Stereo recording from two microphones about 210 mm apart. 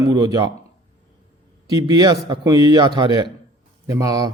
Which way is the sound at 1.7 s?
20° right (ahead or behind).